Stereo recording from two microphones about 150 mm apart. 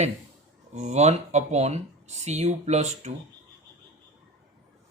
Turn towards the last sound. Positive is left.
turn(degrees=-45)  # may be behind; listen again after turning